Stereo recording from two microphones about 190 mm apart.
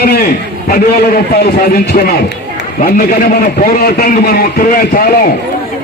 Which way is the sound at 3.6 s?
50° left (ahead or behind).